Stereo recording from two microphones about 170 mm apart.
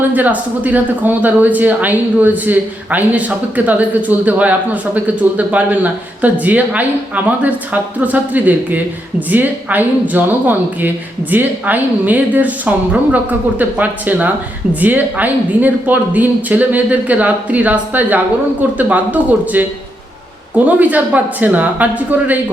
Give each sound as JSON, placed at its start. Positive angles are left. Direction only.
{"t": 0.1, "sound": "speech", "side_deg": -10}
{"t": 20.7, "sound": "speech", "side_deg": -10}